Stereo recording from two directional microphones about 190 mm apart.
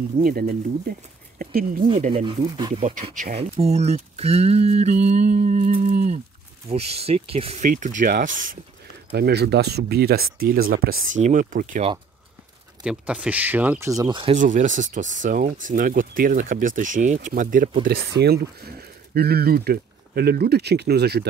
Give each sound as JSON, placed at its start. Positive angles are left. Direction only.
{"t": 0.2, "sound": "speech", "side_deg": -50}
{"t": 2.2, "sound": "speech", "side_deg": -20}
{"t": 2.7, "sound": "speech", "side_deg": -40}
{"t": 3.3, "sound": "speech", "side_deg": -35}
{"t": 9.1, "sound": "speech", "side_deg": -60}
{"t": 12.8, "sound": "speech", "side_deg": -5}
{"t": 14.3, "sound": "speech", "side_deg": -40}